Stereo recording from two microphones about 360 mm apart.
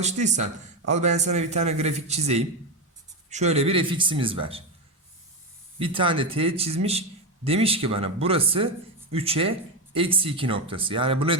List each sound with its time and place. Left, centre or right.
0.0 s speech: centre
5.8 s speech: centre